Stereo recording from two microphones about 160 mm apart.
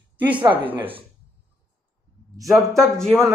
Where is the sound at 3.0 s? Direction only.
15° right (ahead or behind).